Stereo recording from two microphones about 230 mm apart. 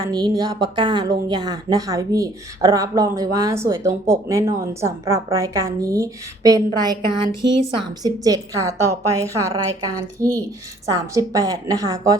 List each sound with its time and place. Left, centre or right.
0.0 s speech: centre